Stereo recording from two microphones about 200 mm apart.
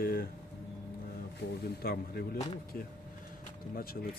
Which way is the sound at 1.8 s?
50° left (ahead or behind).